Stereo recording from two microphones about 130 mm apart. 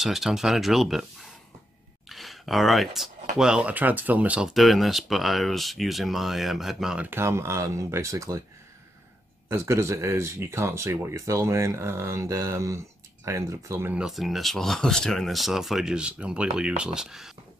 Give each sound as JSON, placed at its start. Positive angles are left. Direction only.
{"t": 0.0, "sound": "speech", "side_deg": 0}
{"t": 2.0, "sound": "speech", "side_deg": 0}
{"t": 7.1, "sound": "speech", "side_deg": -20}
{"t": 9.5, "sound": "speech", "side_deg": -20}
{"t": 13.9, "sound": "speech", "side_deg": -5}